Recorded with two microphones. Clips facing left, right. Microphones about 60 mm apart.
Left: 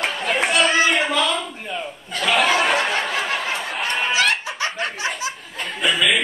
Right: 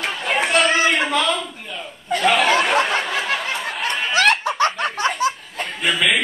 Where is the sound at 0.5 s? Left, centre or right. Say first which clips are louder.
Right 1 dB; right.